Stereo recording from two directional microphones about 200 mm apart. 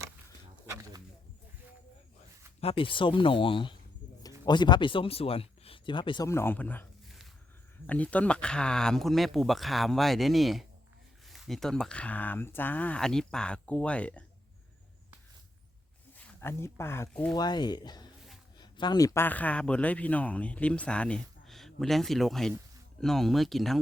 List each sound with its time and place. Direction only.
2.6 s speech: 25° left (ahead or behind); by 14.3 s 5° left (ahead or behind)
16.1 s speech: 10° left (ahead or behind)
17.3 s speech: 20° left (ahead or behind); by 23.7 s centre (ahead or behind)